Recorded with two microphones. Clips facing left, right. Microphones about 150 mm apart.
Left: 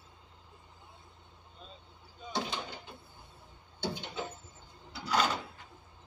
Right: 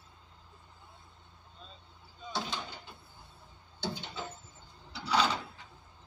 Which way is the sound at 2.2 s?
15° left (ahead or behind).